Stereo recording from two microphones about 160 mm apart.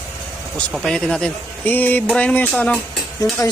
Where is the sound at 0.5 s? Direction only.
5° left (ahead or behind).